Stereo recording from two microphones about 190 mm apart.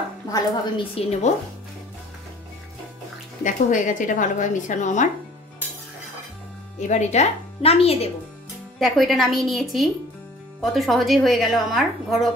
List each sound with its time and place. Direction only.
0.3 s a woman's voice: 30° left (ahead or behind)
3.4 s a woman's voice: 40° left (ahead or behind)
6.9 s a woman's voice: 35° left (ahead or behind)
8.7 s a woman's voice: centre (ahead or behind)